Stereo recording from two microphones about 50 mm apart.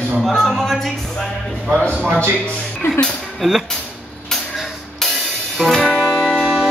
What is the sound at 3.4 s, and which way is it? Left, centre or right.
Speech, centre.